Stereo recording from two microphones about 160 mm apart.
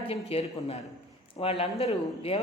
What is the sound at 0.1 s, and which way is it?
Speech, 40° left (ahead or behind).